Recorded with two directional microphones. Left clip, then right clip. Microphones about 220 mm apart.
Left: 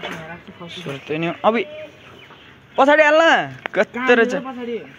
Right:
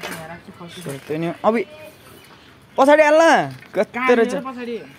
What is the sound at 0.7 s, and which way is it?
Speech, 20° right (ahead or behind).